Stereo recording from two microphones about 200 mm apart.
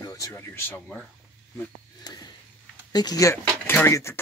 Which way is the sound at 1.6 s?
20° left (ahead or behind).